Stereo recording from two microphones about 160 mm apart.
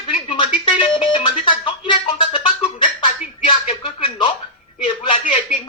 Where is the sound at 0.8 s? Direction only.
35° left (ahead or behind).